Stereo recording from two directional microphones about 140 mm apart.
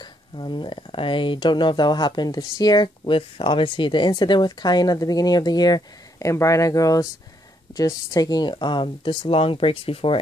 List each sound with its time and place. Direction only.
0.0 s speech: 35° left (ahead or behind)